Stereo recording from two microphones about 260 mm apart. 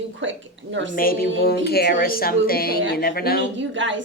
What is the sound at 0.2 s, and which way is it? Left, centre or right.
Speech, right.